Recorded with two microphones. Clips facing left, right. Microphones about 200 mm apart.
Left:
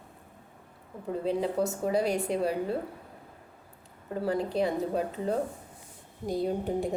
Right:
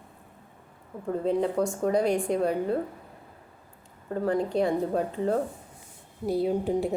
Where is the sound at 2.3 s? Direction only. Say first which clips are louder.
Right 3 dB; 45° right (ahead or behind).